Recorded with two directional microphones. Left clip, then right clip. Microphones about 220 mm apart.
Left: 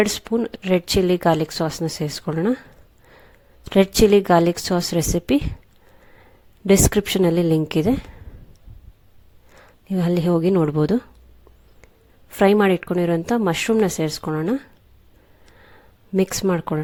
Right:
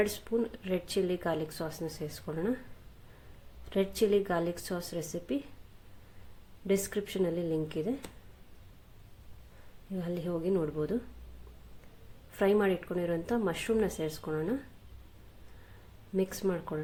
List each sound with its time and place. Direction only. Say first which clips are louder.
0.0 s speech: left 10 dB; 40° left (ahead or behind)
3.7 s speech: left 13 dB; 45° left (ahead or behind)
6.7 s speech: left 14 dB; 50° left (ahead or behind)
9.9 s speech: left 15 dB; 45° left (ahead or behind)
12.4 s speech: left 12 dB; 45° left (ahead or behind)
16.1 s speech: left 11 dB; 45° left (ahead or behind)